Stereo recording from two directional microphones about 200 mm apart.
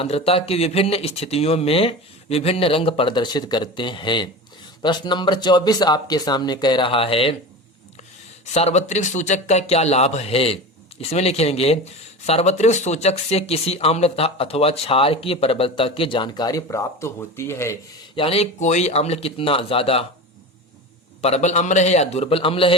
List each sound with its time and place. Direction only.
0.0 s speech: 30° left (ahead or behind)
8.4 s speech: 35° left (ahead or behind); by 17.7 s 15° left (ahead or behind)
18.1 s speech: 30° left (ahead or behind)
21.2 s speech: 30° left (ahead or behind)